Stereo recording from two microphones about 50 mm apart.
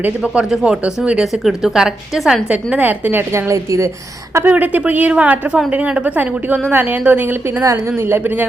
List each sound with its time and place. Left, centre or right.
0.6 s a woman's voice: right
1.2 s a woman's voice: centre
2.5 s a woman's voice: right
2.8 s speech: right
3.3 s a woman's voice: right
4.4 s speech: right
5.1 s a woman's voice: right
7.6 s a woman's voice: right
8.1 s speech: right